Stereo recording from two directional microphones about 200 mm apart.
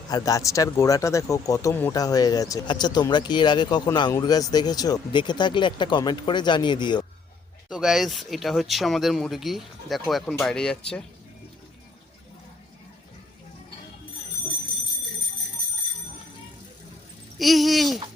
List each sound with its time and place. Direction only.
0.1 s speech: 15° left (ahead or behind)
7.7 s speech: centre (ahead or behind)
17.3 s speech: centre (ahead or behind)